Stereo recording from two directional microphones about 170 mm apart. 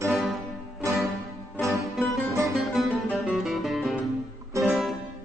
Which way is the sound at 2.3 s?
15° right (ahead or behind).